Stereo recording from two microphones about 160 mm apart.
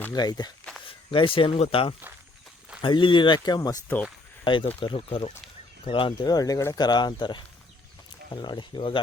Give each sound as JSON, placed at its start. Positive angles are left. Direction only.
{"t": 0.1, "sound": "speech", "side_deg": 25}